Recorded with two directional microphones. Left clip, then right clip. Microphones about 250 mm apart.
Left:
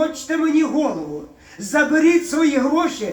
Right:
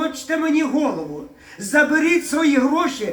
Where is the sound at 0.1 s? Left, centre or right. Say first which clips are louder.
Left 1 dB; right.